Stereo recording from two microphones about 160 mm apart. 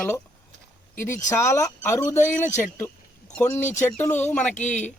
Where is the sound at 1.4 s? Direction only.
20° left (ahead or behind).